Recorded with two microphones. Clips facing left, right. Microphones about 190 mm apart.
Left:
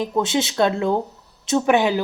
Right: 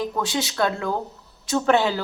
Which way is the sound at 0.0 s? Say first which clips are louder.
Left 4 dB; 20° left (ahead or behind).